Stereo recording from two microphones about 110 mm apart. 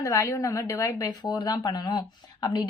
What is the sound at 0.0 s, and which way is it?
A woman's voice, 30° left (ahead or behind).